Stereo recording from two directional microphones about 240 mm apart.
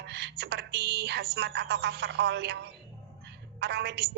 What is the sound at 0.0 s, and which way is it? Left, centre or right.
A woman's voice, right.